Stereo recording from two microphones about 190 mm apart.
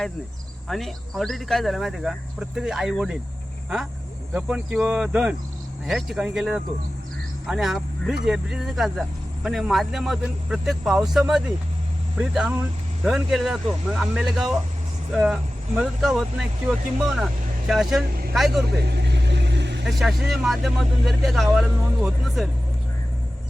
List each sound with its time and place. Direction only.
0.7 s speech: centre (ahead or behind)
4.4 s speech: 5° right (ahead or behind)
18.9 s vehicle: 60° right (ahead or behind)
19.8 s speech: centre (ahead or behind)